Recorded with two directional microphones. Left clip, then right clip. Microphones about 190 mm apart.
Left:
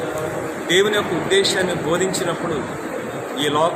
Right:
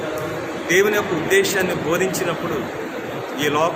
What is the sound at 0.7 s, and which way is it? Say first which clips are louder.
Speech: even; 15° right (ahead or behind).